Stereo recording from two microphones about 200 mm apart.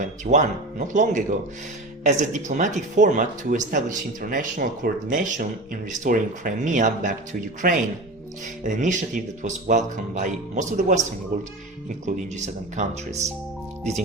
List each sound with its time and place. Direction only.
0.0 s speech: 40° right (ahead or behind)